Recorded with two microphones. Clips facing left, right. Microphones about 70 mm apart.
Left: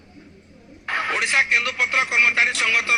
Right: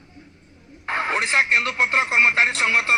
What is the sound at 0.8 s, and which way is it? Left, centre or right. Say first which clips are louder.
Speech: right 1 dB; right.